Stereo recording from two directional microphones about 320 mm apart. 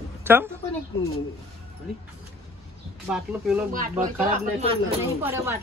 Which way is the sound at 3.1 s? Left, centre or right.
Centre.